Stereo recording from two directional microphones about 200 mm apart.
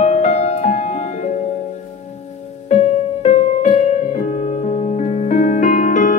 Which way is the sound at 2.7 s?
35° left (ahead or behind).